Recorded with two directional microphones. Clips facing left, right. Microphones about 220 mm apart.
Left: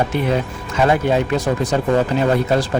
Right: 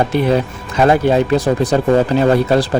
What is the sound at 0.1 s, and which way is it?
Speech, 35° right (ahead or behind).